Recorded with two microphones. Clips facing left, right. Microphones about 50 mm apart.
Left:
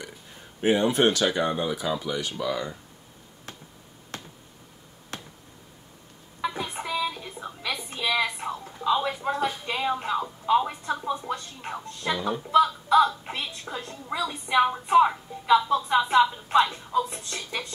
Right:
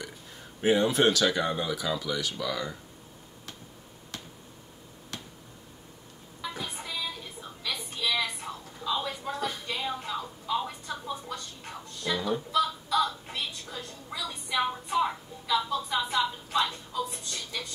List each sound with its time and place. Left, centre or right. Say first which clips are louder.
0.6 s speech: left 2 dB; left
5.1 s finger snapping: left 3 dB; left
6.4 s a sound: left 7 dB; left